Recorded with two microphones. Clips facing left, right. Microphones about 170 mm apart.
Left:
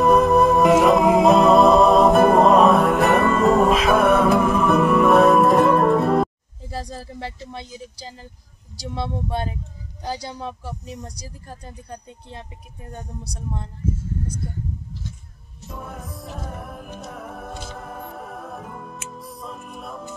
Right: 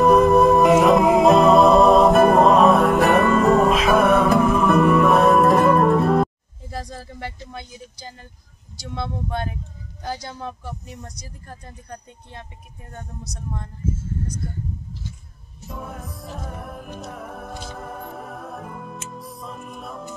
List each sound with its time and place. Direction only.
0.0 s music: centre (ahead or behind)
6.7 s speech: 35° left (ahead or behind)
11.1 s speech: 30° left (ahead or behind)
15.7 s music: centre (ahead or behind)